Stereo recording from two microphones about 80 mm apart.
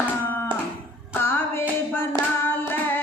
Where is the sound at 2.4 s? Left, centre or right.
Left.